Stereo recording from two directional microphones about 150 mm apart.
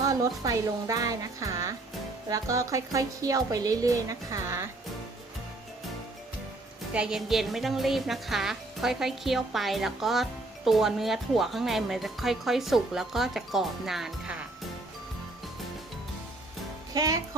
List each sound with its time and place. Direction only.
0.0 s a woman's voice: 20° right (ahead or behind)
6.9 s speech: 5° right (ahead or behind)
16.9 s speech: 25° right (ahead or behind)